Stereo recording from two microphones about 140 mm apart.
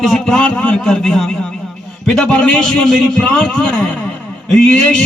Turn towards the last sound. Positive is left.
turn(degrees=5)  # may be behind; listen again after turning